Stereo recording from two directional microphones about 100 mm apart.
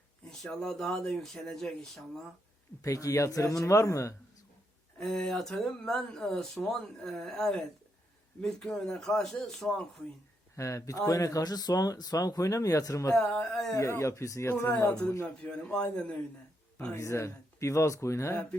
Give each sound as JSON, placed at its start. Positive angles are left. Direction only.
{"t": 0.3, "sound": "speech", "side_deg": 5}
{"t": 2.8, "sound": "speech", "side_deg": 35}
{"t": 4.9, "sound": "speech", "side_deg": 5}
{"t": 10.5, "sound": "speech", "side_deg": 30}
{"t": 13.1, "sound": "speech", "side_deg": 5}
{"t": 13.7, "sound": "speech", "side_deg": 30}
{"t": 15.5, "sound": "a man's voice", "side_deg": 10}
{"t": 16.9, "sound": "speech", "side_deg": 30}